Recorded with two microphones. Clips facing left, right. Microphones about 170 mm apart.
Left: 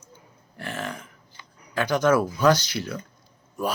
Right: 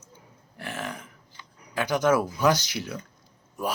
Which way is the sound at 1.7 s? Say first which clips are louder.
Left 2 dB; 15° right (ahead or behind).